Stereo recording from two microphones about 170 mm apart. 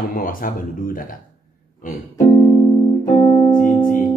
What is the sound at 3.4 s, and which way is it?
Music, 50° left (ahead or behind).